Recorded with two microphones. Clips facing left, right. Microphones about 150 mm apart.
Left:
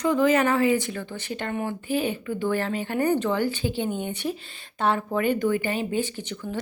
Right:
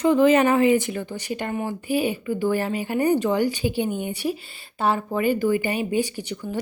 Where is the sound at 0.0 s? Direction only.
20° right (ahead or behind).